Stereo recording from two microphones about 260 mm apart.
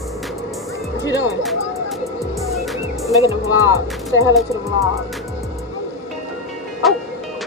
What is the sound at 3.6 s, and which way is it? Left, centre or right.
Speech, centre.